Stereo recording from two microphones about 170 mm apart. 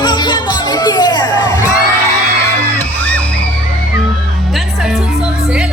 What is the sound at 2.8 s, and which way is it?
Music, 10° left (ahead or behind).